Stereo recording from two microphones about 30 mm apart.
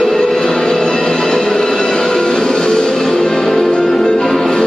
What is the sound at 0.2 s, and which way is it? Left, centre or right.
Music, centre.